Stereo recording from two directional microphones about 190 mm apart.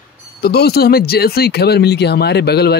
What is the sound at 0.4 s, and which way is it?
Speech, 55° left (ahead or behind).